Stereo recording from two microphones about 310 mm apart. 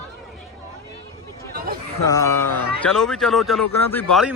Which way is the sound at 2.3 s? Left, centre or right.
Left.